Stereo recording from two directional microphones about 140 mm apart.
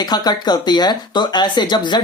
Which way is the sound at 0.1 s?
30° left (ahead or behind).